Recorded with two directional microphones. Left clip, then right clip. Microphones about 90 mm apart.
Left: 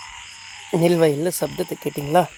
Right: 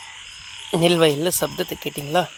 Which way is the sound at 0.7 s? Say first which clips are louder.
Even; 60° left (ahead or behind).